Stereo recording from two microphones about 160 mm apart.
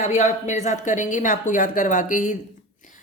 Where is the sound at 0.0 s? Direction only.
45° left (ahead or behind).